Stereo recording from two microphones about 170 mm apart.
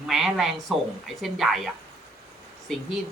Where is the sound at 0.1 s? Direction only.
Centre (ahead or behind).